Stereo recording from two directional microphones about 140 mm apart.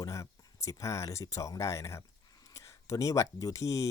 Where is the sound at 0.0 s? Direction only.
25° left (ahead or behind).